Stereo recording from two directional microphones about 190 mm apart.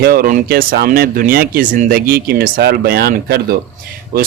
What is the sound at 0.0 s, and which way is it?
Speech, 50° right (ahead or behind).